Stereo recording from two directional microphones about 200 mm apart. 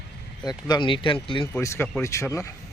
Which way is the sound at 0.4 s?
20° left (ahead or behind).